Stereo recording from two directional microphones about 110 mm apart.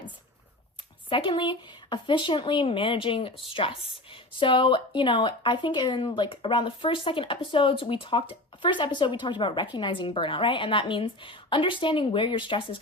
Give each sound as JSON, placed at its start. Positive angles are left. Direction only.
{"t": 1.1, "sound": "speech", "side_deg": 50}